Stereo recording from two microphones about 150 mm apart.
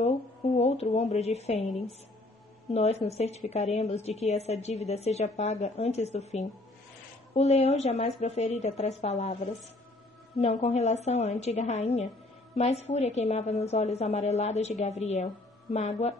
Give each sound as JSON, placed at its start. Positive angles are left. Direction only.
{"t": 0.0, "sound": "speech", "side_deg": 45}
{"t": 2.7, "sound": "a woman's voice", "side_deg": 45}